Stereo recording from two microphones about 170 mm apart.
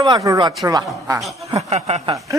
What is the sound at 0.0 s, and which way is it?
Speech, 20° right (ahead or behind).